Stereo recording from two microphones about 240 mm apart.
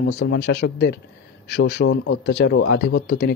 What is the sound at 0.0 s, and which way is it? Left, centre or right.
A man's voice, left.